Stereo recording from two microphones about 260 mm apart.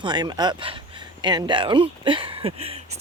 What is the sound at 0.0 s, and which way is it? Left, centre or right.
Speech, centre.